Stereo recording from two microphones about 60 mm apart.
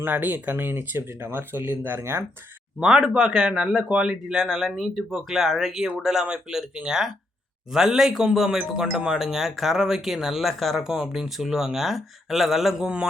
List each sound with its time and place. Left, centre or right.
0.0 s speech: right
2.8 s a man's voice: centre
10.8 s a man's voice: centre